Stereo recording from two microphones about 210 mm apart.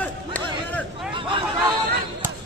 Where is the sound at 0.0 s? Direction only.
5° left (ahead or behind).